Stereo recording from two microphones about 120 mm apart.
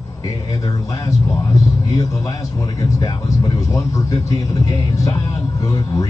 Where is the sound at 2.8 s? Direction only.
35° left (ahead or behind).